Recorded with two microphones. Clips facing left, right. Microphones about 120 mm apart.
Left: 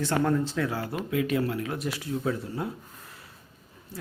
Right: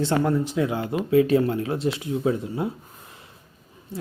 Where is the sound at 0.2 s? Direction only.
10° right (ahead or behind).